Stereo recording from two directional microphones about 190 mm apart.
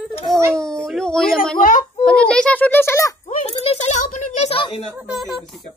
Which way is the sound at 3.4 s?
35° left (ahead or behind).